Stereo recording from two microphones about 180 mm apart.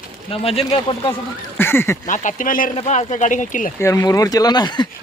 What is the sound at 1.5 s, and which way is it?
Speech, 10° left (ahead or behind).